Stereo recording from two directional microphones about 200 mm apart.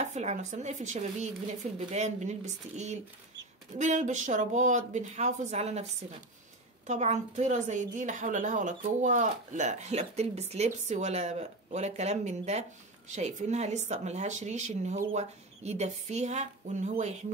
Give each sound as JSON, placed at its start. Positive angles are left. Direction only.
{"t": 0.0, "sound": "a woman's voice", "side_deg": -35}
{"t": 6.9, "sound": "a woman's voice", "side_deg": -35}